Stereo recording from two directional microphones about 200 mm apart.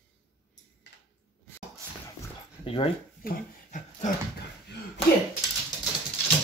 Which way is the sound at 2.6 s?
25° left (ahead or behind).